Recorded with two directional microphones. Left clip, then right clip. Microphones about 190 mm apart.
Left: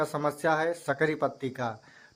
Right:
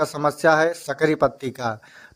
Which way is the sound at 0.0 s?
35° right (ahead or behind).